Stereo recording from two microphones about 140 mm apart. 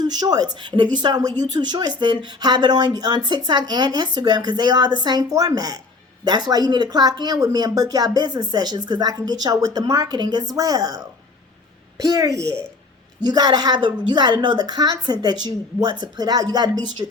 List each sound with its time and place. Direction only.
0.0 s a woman's voice: 30° right (ahead or behind)